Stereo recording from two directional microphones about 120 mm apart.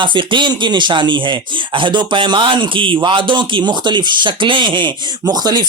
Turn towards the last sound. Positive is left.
turn(degrees=-35)  # may be behind; listen again after turning